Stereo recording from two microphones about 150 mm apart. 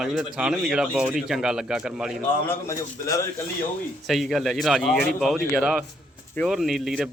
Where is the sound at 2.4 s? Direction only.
20° left (ahead or behind).